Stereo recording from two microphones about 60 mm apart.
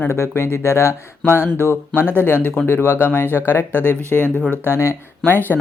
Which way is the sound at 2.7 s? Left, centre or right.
Left.